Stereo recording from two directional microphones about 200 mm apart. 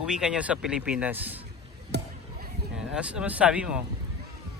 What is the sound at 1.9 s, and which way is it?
Basketball bounce, 55° right (ahead or behind).